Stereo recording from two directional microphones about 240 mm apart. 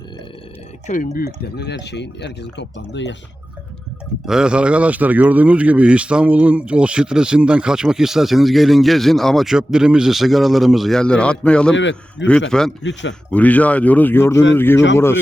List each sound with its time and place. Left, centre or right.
0.9 s speech: left
1.4 s speech: left
4.3 s a man's voice: centre
11.7 s speech: left
12.5 s a man's voice: centre
12.8 s speech: left
13.3 s speech: centre